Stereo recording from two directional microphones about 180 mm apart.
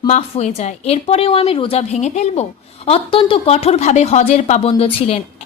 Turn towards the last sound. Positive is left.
turn(degrees=35)  # may be behind; listen again after turning